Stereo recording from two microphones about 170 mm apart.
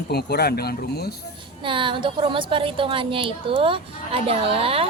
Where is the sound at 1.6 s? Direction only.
30° right (ahead or behind).